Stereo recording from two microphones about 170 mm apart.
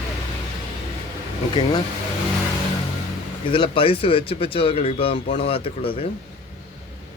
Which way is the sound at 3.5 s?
30° left (ahead or behind).